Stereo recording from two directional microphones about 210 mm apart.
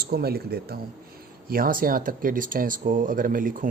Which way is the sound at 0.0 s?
50° right (ahead or behind).